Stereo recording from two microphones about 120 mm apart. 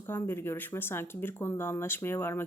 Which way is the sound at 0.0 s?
20° left (ahead or behind).